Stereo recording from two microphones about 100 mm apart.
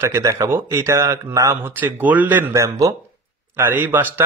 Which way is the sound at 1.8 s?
15° right (ahead or behind).